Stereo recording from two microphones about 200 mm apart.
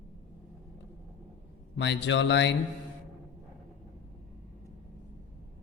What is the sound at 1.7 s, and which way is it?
Speech, 65° left (ahead or behind).